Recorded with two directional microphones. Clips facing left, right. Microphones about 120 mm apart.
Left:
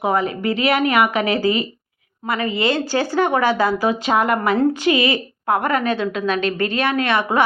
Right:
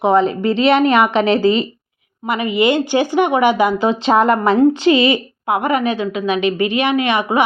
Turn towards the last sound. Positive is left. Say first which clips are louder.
# right 2 dB
turn(degrees=-15)  # may be behind; listen again after turning